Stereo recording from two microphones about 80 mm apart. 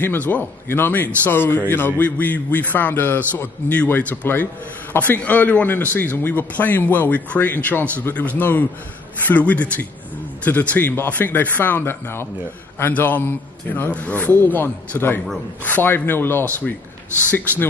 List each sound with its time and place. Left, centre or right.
0.0 s speech: left